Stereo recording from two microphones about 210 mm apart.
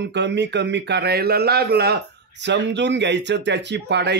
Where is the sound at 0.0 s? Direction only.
55° right (ahead or behind).